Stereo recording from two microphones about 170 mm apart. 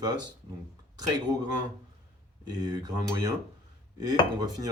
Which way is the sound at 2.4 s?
25° right (ahead or behind).